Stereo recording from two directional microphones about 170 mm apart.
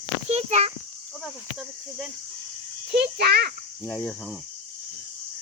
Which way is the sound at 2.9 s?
70° right (ahead or behind).